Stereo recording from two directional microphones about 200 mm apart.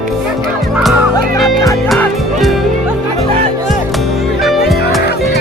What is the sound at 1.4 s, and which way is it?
Music, 15° left (ahead or behind).